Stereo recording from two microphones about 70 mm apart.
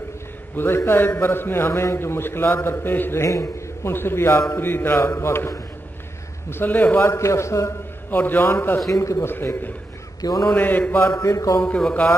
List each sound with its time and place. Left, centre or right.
0.6 s a man's voice: left
3.3 s a man's voice: left
3.9 s a man's voice: left
6.5 s a man's voice: left
8.1 s a man's voice: left
8.9 s a man's voice: left
9.3 s a man's voice: left
10.2 s a man's voice: left
10.5 s mantra: left
11.2 s a man's voice: left